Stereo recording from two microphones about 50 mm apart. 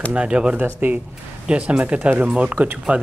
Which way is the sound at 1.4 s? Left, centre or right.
Centre.